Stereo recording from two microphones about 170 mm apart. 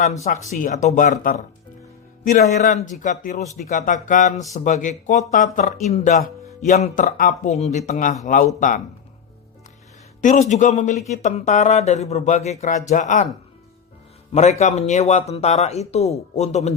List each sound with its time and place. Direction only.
0.3 s speech: 50° left (ahead or behind)
10.2 s speech: 45° left (ahead or behind)
14.6 s speech: 40° left (ahead or behind)